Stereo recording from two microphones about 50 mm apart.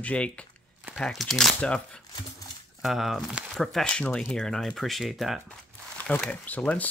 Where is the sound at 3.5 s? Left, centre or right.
Centre.